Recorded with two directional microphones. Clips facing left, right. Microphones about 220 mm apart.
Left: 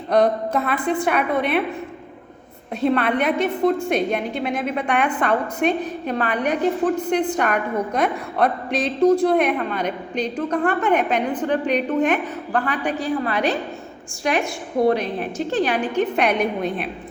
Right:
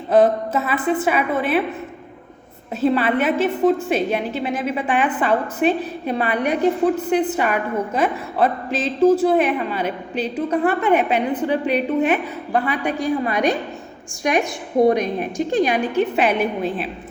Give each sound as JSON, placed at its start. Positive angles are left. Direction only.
{"t": 0.1, "sound": "a woman's voice", "side_deg": -5}
{"t": 2.8, "sound": "a woman's voice", "side_deg": -5}